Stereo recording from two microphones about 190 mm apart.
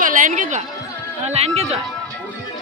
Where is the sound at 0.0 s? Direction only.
45° right (ahead or behind).